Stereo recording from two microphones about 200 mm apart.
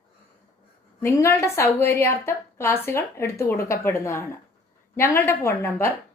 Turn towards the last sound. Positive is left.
turn(degrees=10)  # may be behind; listen again after turning